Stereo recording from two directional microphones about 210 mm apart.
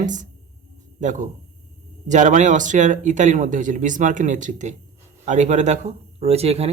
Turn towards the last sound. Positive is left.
turn(degrees=-30)  # may be behind; listen again after turning